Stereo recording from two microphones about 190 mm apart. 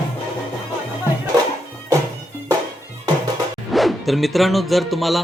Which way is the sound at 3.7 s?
Centre (ahead or behind).